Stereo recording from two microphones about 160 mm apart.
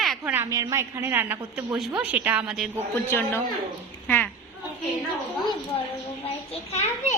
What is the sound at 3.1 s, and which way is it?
Speech, 15° left (ahead or behind).